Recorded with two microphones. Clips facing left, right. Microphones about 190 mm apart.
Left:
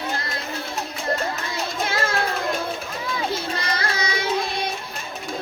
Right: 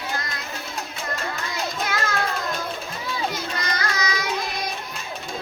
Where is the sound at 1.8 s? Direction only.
30° left (ahead or behind).